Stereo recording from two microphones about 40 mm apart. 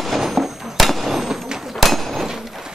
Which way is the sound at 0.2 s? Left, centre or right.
Centre.